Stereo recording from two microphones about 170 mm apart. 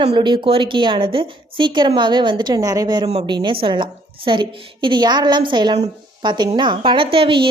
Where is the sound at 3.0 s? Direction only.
40° right (ahead or behind).